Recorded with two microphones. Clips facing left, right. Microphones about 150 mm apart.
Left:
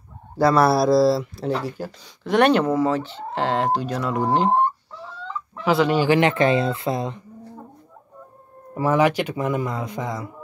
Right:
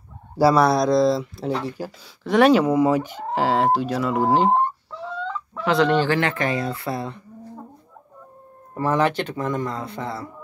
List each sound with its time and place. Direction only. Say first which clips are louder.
0.4 s fowl: right 1 dB; 5° right (ahead or behind)
0.7 s speech: left 1 dB; 5° left (ahead or behind)
2.7 s speech: right 2 dB; 15° right (ahead or behind)
5.6 s speech: even; 5° left (ahead or behind)
8.7 s speech: left 2 dB; 10° left (ahead or behind)